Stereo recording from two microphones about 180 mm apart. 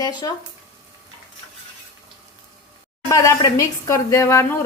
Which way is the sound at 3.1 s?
15° left (ahead or behind).